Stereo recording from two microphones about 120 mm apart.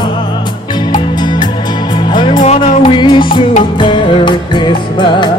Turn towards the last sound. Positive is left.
turn(degrees=40)  # may be behind; listen again after turning